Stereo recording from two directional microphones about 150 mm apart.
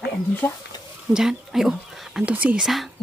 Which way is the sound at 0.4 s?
15° left (ahead or behind).